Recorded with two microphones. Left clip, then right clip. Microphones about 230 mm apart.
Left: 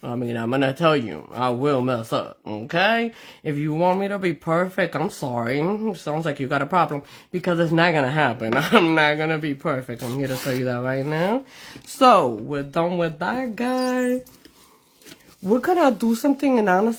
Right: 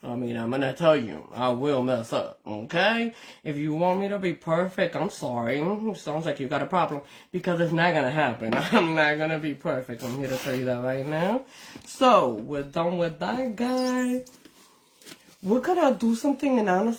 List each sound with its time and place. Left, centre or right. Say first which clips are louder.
0.0 s speech: left 4 dB; left
15.4 s speech: left 4 dB; left